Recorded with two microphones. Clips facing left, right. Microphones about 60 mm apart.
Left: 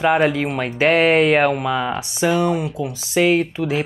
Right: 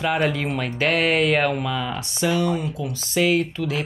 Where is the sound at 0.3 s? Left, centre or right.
Centre.